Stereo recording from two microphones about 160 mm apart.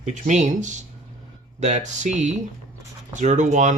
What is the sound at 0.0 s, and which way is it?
Speech, 50° right (ahead or behind).